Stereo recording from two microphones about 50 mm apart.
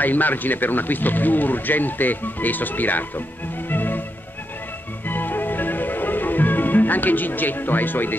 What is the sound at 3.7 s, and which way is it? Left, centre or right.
Music, left.